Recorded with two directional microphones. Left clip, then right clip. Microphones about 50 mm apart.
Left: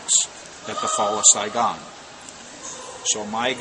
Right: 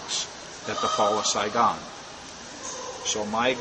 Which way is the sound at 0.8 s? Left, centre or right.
Left.